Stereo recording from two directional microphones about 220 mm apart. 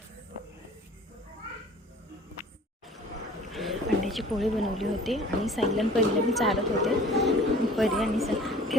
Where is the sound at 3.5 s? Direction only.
Centre (ahead or behind).